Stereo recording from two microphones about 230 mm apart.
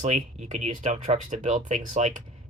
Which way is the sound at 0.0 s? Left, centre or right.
Right.